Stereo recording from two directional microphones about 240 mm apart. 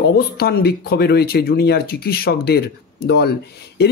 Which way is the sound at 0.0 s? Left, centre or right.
Left.